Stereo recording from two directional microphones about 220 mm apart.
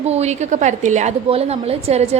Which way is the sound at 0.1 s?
30° right (ahead or behind).